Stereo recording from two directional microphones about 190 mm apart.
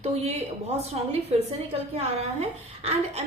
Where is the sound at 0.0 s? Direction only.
35° right (ahead or behind).